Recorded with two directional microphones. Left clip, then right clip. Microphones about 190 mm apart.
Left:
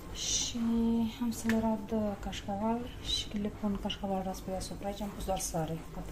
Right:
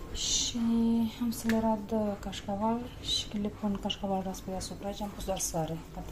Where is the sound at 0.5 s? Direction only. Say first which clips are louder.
Right 2 dB; 10° right (ahead or behind).